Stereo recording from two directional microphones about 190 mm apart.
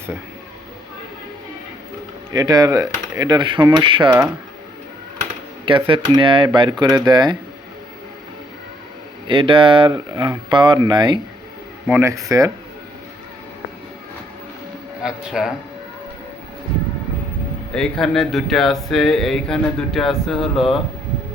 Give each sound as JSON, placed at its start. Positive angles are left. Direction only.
{"t": 2.3, "sound": "speech", "side_deg": -20}
{"t": 5.9, "sound": "speech", "side_deg": -25}
{"t": 9.2, "sound": "speech", "side_deg": -25}
{"t": 15.0, "sound": "speech", "side_deg": -5}
{"t": 17.7, "sound": "speech", "side_deg": 5}